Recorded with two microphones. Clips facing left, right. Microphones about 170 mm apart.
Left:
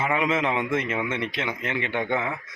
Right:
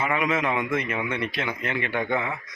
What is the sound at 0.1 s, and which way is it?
Speech, 25° left (ahead or behind).